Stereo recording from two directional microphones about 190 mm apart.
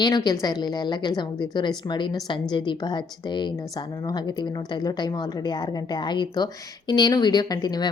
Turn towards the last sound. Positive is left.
turn(degrees=20)  # may be behind; listen again after turning